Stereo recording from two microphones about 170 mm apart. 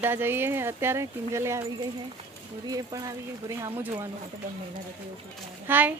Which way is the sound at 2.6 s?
20° right (ahead or behind).